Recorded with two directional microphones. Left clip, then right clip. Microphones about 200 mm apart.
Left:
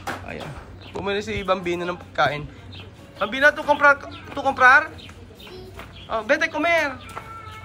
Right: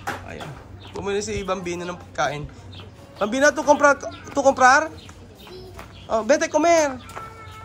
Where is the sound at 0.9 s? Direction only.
15° right (ahead or behind).